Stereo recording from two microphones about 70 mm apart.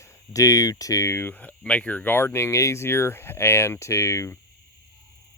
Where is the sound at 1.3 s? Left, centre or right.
Left.